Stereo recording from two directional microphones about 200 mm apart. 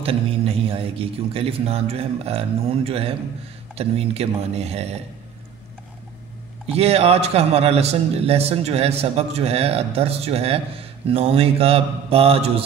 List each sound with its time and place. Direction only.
0.0 s a man's voice: 30° right (ahead or behind)
6.7 s a man's voice: 30° right (ahead or behind)